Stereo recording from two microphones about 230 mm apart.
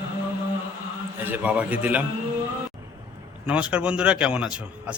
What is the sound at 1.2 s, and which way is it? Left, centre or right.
Speech, centre.